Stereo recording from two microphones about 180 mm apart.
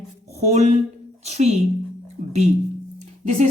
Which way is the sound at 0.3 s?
40° right (ahead or behind).